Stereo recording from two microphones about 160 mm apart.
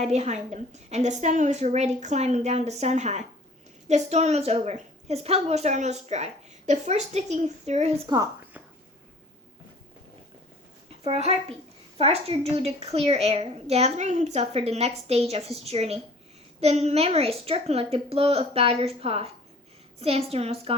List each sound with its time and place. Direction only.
0.0 s a woman's voice: 45° right (ahead or behind)
8.0 s speech: 20° right (ahead or behind)
11.0 s a child's voice: 40° right (ahead or behind)